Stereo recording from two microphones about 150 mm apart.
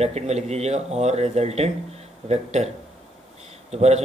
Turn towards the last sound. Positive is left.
turn(degrees=-45)  # may be behind; listen again after turning